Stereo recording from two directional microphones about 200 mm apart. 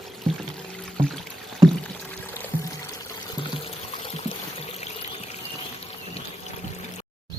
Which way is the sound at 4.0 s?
25° left (ahead or behind).